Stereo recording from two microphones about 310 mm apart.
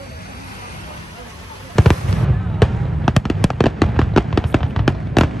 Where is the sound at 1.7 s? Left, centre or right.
Centre.